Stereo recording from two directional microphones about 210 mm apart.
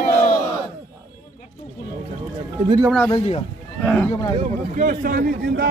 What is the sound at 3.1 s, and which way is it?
Speech, 30° left (ahead or behind).